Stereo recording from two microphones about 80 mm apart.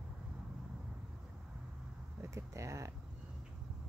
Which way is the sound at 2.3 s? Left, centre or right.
Right.